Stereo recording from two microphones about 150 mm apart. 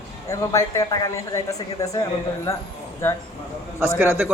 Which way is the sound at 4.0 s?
15° right (ahead or behind).